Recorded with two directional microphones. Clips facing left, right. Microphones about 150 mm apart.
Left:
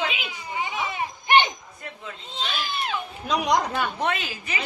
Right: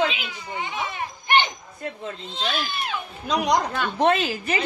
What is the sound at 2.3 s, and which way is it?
Speech, centre (ahead or behind).